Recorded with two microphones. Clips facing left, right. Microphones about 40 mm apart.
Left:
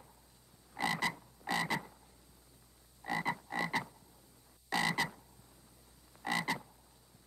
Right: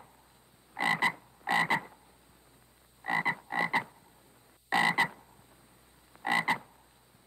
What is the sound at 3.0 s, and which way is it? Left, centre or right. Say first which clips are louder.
Croak: right 6 dB; right.